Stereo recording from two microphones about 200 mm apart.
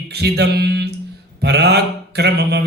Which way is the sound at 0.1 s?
55° right (ahead or behind).